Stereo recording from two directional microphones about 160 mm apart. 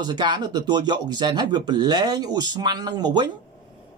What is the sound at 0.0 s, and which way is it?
Speech, 25° right (ahead or behind).